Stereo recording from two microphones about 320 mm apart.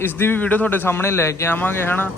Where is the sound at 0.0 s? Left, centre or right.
Centre.